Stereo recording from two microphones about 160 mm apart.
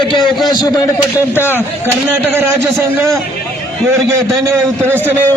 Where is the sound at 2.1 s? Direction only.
10° right (ahead or behind).